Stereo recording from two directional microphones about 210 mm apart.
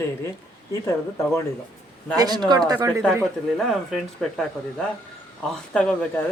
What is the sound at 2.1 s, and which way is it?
Speech, 20° right (ahead or behind).